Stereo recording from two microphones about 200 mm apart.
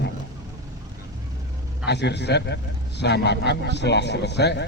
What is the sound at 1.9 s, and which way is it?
A man's voice, 60° left (ahead or behind).